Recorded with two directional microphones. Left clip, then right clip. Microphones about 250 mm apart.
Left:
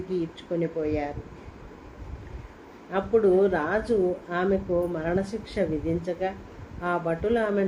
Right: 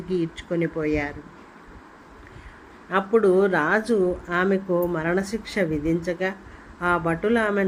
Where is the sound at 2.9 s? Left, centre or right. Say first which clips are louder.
Right 2 dB; right.